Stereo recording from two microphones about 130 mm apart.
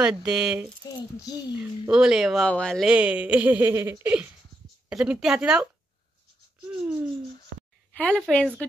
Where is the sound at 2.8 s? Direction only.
10° right (ahead or behind).